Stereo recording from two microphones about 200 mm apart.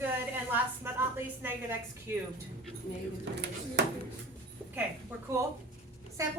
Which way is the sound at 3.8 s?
55° right (ahead or behind).